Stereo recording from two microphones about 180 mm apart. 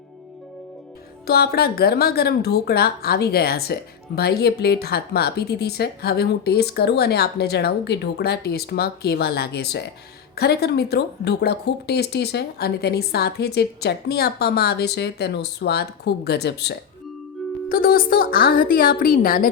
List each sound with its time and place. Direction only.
1.3 s a woman's voice: 60° left (ahead or behind)
17.7 s a woman's voice: 55° left (ahead or behind)